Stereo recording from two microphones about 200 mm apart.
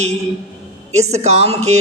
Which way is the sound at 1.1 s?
30° right (ahead or behind).